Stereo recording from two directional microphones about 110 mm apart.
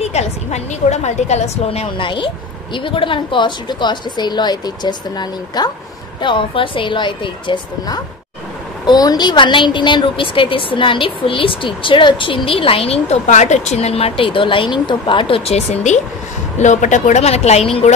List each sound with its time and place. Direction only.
0.0 s a woman's voice: 90° left
2.0 s a woman's voice: 50° left (ahead or behind)
6.2 s a woman's voice: 50° left (ahead or behind); by 17.9 s 70° left (ahead or behind)